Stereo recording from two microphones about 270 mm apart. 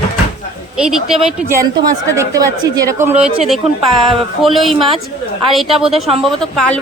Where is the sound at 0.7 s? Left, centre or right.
Centre.